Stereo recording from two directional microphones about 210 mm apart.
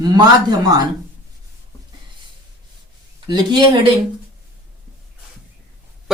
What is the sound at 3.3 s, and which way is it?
Speech, 20° right (ahead or behind).